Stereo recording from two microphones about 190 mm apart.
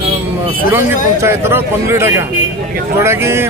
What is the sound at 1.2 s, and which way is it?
Speech, 15° right (ahead or behind).